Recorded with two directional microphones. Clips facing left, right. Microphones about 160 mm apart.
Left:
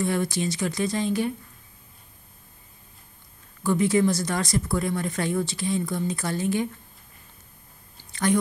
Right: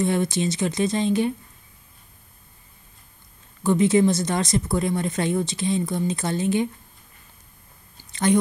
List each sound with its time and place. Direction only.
0.0 s speech: 20° right (ahead or behind)
3.6 s speech: 20° right (ahead or behind)
8.0 s a sound: 20° right (ahead or behind)